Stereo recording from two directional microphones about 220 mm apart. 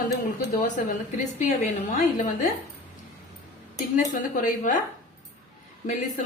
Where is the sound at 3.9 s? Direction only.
40° left (ahead or behind).